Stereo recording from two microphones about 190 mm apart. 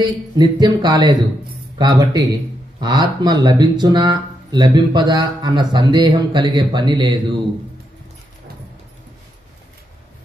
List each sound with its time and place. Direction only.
0.0 s speech: 25° right (ahead or behind)